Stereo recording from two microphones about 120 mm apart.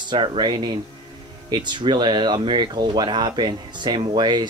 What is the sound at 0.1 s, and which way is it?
Speech, 45° right (ahead or behind).